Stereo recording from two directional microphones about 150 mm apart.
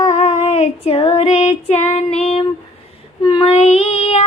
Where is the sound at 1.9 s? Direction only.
45° left (ahead or behind).